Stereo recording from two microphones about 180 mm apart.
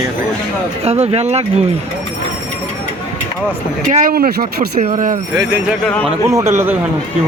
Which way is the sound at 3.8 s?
50° right (ahead or behind).